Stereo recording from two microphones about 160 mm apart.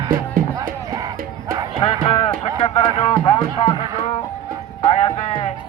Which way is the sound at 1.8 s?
35° left (ahead or behind).